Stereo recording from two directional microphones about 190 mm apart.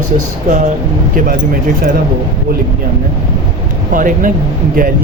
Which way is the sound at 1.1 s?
45° right (ahead or behind).